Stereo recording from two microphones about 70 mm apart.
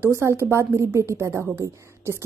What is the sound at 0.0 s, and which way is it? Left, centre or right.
A woman's voice, right.